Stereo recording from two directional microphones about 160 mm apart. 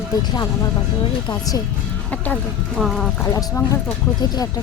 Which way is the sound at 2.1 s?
10° left (ahead or behind).